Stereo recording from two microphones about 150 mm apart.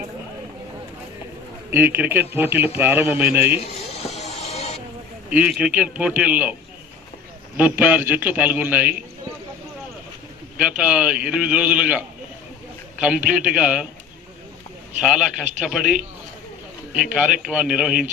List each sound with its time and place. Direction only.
1.7 s a man's voice: 15° right (ahead or behind)
3.6 s a sound: 45° left (ahead or behind)
5.3 s a man's voice: 10° right (ahead or behind)
10.6 s a man's voice: 5° right (ahead or behind)
15.0 s a man's voice: 5° right (ahead or behind)
17.1 s a man's voice: 10° right (ahead or behind)